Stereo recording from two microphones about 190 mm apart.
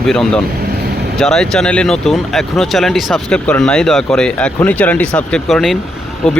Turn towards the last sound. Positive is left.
turn(degrees=5)  # may be behind; listen again after turning